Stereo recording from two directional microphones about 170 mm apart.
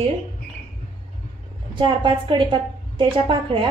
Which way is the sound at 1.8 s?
30° right (ahead or behind).